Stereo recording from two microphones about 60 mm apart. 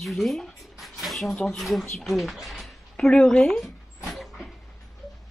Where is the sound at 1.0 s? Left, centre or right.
Centre.